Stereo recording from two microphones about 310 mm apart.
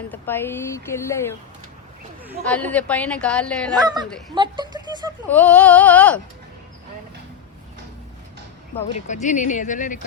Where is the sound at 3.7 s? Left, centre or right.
Centre.